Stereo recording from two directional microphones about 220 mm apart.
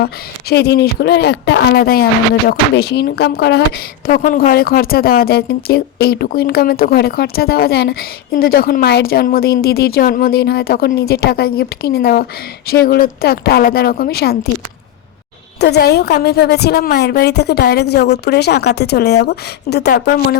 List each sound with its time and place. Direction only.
0.0 s speech: 45° left (ahead or behind)
15.6 s speech: 50° left (ahead or behind)